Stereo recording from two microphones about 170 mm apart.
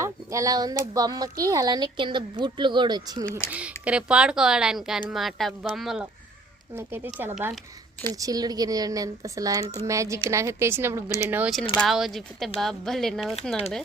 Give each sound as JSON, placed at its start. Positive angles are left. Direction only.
{"t": 0.0, "sound": "speech", "side_deg": -20}
{"t": 3.2, "sound": "speech", "side_deg": 10}
{"t": 3.8, "sound": "a woman's voice", "side_deg": -5}
{"t": 6.7, "sound": "a woman's voice", "side_deg": -15}